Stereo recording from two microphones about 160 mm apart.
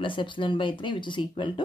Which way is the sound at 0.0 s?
30° left (ahead or behind).